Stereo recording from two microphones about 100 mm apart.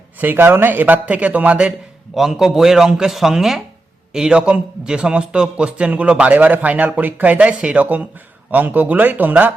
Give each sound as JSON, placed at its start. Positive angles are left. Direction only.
{"t": 0.2, "sound": "a man's voice", "side_deg": -20}